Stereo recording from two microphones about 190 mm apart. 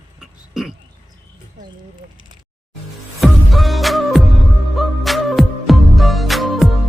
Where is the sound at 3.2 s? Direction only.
Centre (ahead or behind).